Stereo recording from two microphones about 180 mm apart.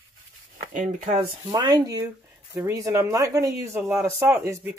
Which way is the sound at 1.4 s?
20° right (ahead or behind).